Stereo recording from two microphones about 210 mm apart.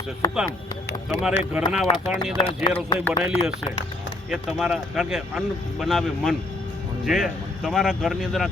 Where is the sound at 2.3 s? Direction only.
25° left (ahead or behind).